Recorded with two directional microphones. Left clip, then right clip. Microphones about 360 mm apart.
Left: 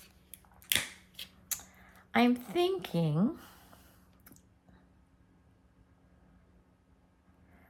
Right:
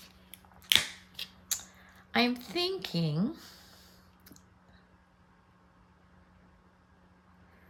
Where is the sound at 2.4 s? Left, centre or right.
Centre.